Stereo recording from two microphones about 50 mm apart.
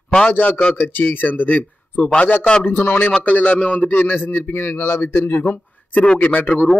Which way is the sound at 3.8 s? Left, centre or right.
Left.